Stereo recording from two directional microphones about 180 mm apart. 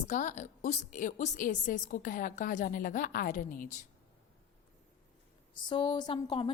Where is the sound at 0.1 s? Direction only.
45° left (ahead or behind).